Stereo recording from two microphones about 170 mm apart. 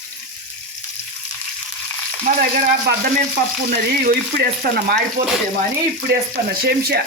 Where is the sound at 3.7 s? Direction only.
60° right (ahead or behind).